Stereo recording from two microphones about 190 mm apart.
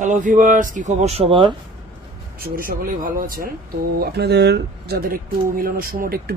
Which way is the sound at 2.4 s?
50° right (ahead or behind).